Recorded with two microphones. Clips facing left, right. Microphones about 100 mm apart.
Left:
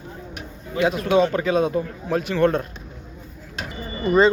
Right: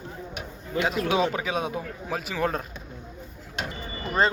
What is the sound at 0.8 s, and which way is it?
A man's voice, centre (ahead or behind).